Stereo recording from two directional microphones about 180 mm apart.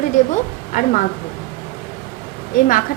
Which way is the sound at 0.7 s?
45° left (ahead or behind).